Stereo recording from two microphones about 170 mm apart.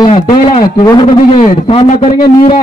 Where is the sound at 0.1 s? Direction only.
35° left (ahead or behind).